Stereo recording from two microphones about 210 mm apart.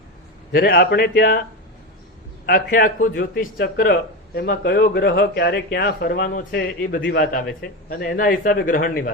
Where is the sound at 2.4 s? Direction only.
45° left (ahead or behind).